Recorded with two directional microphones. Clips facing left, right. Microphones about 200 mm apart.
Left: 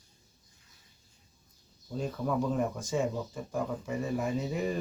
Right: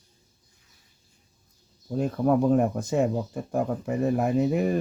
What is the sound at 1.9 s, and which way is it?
Speech, 55° right (ahead or behind).